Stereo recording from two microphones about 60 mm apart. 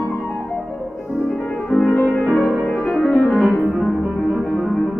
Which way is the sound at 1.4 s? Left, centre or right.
Centre.